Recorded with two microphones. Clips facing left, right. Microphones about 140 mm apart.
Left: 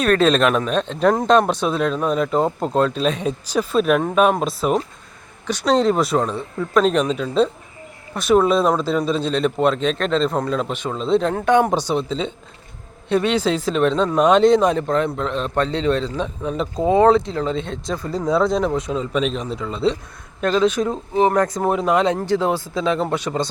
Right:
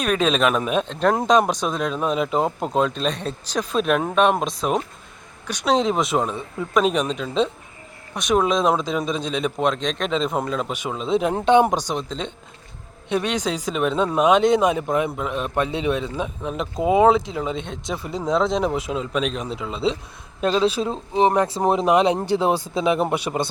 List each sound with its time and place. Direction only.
0.0 s speech: 10° right (ahead or behind)
5.5 s speech: 10° right (ahead or behind)
5.7 s speech: centre (ahead or behind)
8.6 s speech: 15° right (ahead or behind)
11.3 s speech: 25° right (ahead or behind)
11.6 s speech: 10° right (ahead or behind)
13.1 s speech: centre (ahead or behind)
17.9 s speech: 20° right (ahead or behind)
18.3 s speech: centre (ahead or behind)
18.6 s speech: 10° right (ahead or behind)
20.6 s speech: 30° right (ahead or behind); by 23.5 s 15° right (ahead or behind)